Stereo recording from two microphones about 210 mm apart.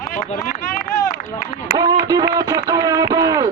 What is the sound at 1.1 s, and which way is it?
Speech, 35° left (ahead or behind).